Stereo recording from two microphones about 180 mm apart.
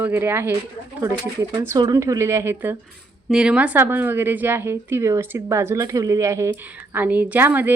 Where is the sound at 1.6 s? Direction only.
20° right (ahead or behind).